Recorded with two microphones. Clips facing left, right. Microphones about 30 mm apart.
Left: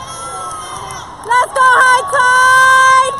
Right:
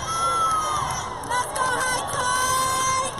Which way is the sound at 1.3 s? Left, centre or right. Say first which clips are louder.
Left 15 dB; left.